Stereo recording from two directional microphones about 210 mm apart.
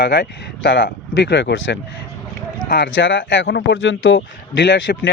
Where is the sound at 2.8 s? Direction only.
65° left (ahead or behind).